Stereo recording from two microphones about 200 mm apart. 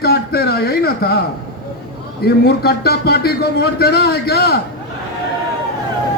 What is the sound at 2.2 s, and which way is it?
A man's voice, 50° left (ahead or behind).